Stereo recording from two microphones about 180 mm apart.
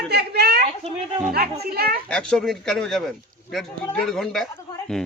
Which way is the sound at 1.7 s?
60° right (ahead or behind).